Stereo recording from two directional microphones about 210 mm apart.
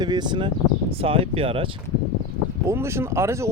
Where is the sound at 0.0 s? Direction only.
20° right (ahead or behind).